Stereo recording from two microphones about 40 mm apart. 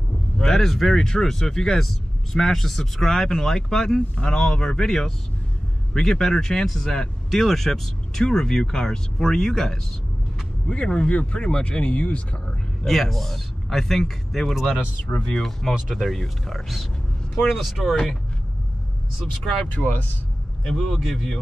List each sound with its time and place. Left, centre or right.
0.5 s speech: centre
10.7 s speech: left
12.8 s speech: centre
14.5 s speech: centre
15.3 s speech: centre
19.7 s speech: left
20.6 s speech: centre